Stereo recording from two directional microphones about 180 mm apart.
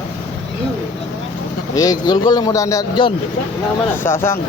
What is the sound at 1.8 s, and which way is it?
Speech, 20° left (ahead or behind).